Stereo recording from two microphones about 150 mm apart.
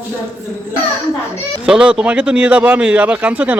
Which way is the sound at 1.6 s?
5° right (ahead or behind).